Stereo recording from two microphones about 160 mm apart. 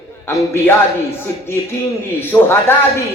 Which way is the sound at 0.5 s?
15° left (ahead or behind).